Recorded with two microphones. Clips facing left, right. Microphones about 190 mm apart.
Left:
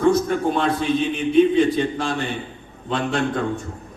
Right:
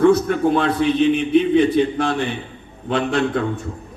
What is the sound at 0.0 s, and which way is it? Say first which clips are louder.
A man's voice: right 3 dB; 60° right (ahead or behind).